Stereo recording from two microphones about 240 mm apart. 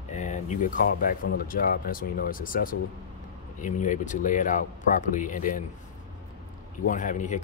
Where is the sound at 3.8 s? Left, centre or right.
Left.